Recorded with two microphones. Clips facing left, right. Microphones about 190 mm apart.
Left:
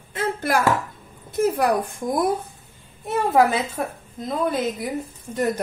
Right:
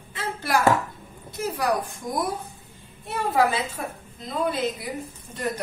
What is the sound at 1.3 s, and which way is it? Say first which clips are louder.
A woman's voice: left 6 dB; 50° left (ahead or behind).